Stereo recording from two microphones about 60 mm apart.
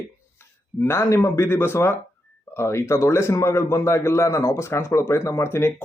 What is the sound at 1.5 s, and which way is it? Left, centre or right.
A man's voice, left.